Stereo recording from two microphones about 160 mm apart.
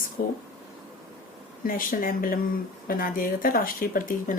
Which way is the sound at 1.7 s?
60° left (ahead or behind).